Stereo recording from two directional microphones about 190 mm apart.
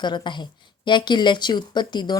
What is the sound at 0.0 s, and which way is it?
Speech, 25° left (ahead or behind).